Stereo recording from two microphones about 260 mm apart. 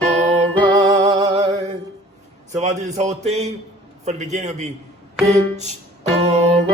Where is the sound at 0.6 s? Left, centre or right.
Right.